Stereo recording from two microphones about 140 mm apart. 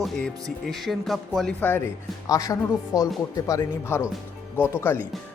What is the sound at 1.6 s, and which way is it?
Speech, 15° left (ahead or behind).